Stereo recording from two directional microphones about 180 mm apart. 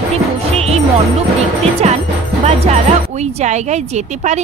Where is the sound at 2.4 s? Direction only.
40° right (ahead or behind).